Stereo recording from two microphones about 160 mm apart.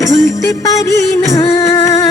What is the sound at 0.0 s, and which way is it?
Music, 20° left (ahead or behind).